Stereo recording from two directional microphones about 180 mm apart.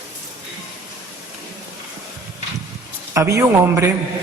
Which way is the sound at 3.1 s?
15° right (ahead or behind).